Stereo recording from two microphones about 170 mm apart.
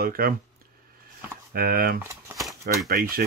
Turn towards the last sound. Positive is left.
turn(degrees=-60)  # may be behind; listen again after turning